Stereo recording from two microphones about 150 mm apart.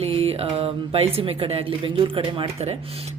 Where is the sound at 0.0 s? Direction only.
40° right (ahead or behind).